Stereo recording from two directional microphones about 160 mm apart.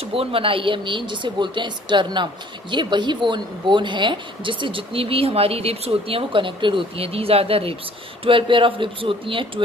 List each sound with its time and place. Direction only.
0.0 s speech: 35° right (ahead or behind)